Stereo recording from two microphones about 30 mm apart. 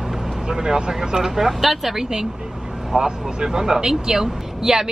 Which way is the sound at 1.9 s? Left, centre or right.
Right.